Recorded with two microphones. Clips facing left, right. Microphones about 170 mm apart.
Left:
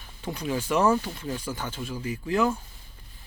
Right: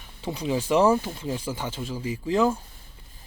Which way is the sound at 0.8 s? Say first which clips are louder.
Even; 10° right (ahead or behind).